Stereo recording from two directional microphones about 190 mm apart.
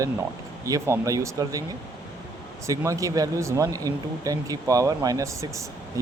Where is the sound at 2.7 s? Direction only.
15° right (ahead or behind).